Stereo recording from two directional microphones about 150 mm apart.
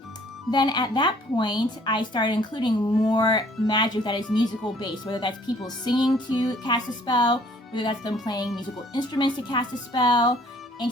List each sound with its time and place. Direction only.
0.5 s a woman's voice: 30° left (ahead or behind)